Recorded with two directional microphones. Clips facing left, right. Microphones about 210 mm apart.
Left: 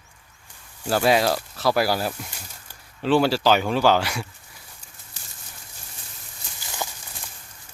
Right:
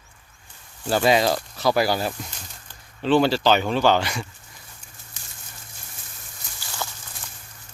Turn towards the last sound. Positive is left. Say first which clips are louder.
# left 1 dB
turn(degrees=15)  # may be behind; listen again after turning